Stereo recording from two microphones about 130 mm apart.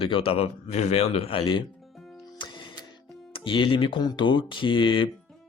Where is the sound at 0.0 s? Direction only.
40° left (ahead or behind).